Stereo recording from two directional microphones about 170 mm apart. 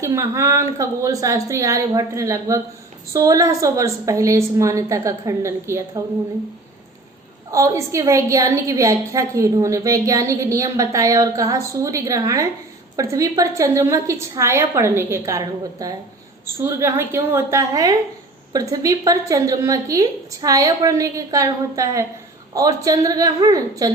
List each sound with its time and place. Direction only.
0.0 s a woman's voice: 15° right (ahead or behind)
7.5 s a woman's voice: 20° right (ahead or behind)